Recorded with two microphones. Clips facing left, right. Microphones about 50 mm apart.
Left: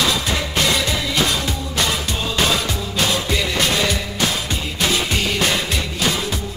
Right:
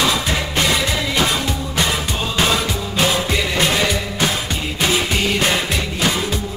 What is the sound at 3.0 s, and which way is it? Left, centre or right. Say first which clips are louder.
Music: right 2 dB; centre.